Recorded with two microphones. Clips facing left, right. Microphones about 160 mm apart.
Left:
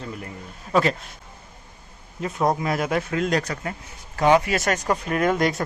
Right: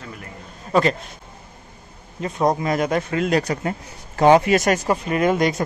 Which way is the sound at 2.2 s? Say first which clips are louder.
Right 2 dB; 5° left (ahead or behind).